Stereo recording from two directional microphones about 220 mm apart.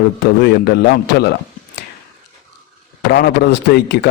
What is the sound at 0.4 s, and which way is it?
A man's voice, 45° left (ahead or behind).